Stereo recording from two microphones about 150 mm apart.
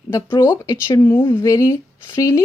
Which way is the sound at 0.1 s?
20° left (ahead or behind).